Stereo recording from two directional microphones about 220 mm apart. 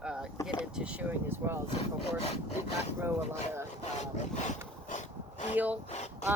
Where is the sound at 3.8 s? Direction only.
30° left (ahead or behind).